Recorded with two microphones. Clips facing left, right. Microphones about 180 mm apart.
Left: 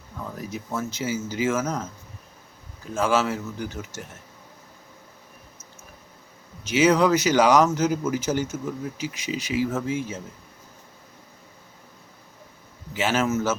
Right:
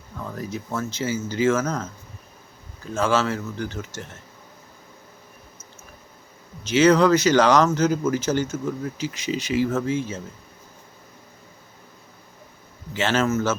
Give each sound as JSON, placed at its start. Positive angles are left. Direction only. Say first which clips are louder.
{"t": 0.3, "sound": "speech", "louder": "right 2 dB", "side_deg": 10}
{"t": 2.9, "sound": "speech", "louder": "right 1 dB", "side_deg": 10}
{"t": 6.7, "sound": "speech", "louder": "right 3 dB", "side_deg": 10}
{"t": 12.9, "sound": "speech", "louder": "right 1 dB", "side_deg": 10}